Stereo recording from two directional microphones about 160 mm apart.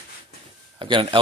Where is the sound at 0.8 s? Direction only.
30° right (ahead or behind).